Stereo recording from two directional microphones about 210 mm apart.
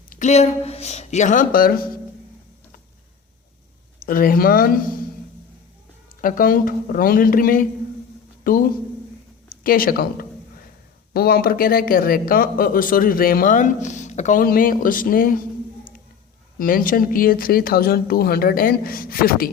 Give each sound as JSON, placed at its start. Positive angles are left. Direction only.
{"t": 0.1, "sound": "speech", "side_deg": 35}
{"t": 4.0, "sound": "speech", "side_deg": 40}
{"t": 6.2, "sound": "speech", "side_deg": 40}
{"t": 9.6, "sound": "speech", "side_deg": 45}